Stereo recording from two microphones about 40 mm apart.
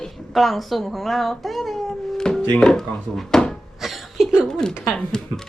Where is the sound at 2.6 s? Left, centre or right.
Centre.